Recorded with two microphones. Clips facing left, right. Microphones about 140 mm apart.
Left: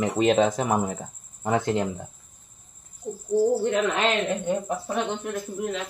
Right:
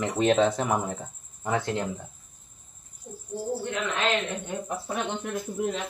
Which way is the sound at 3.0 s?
90° left.